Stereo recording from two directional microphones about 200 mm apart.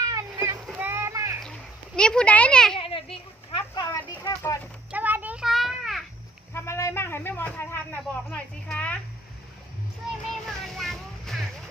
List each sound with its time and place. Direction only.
0.1 s splash: 15° right (ahead or behind)
2.0 s speech: 5° left (ahead or behind)
2.7 s a sound: 25° left (ahead or behind)
3.6 s a sound: 15° left (ahead or behind)
4.2 s speech: 15° left (ahead or behind)
4.9 s children playing: 10° right (ahead or behind)
6.5 s speech: 15° left (ahead or behind)
10.8 s vehicle: centre (ahead or behind)